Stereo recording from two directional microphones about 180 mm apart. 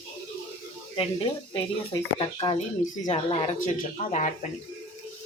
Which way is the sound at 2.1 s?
30° left (ahead or behind).